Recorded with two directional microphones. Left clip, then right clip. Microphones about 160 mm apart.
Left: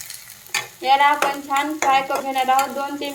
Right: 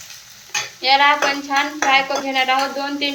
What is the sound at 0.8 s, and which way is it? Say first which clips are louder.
Speech: right 2 dB; 55° left (ahead or behind).